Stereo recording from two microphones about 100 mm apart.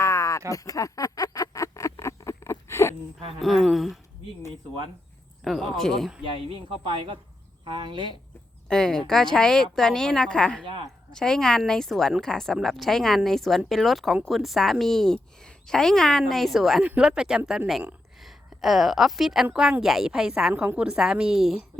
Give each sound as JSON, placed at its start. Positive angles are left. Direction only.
{"t": 0.0, "sound": "a sound", "side_deg": 30}
{"t": 3.4, "sound": "speech", "side_deg": 0}
{"t": 5.4, "sound": "speech", "side_deg": 0}
{"t": 6.8, "sound": "speech", "side_deg": -60}
{"t": 8.6, "sound": "a woman's voice", "side_deg": 5}